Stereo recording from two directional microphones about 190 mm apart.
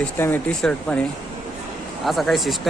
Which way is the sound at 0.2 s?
10° left (ahead or behind).